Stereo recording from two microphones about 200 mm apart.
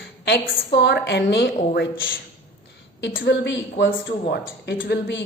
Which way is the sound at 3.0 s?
60° left (ahead or behind).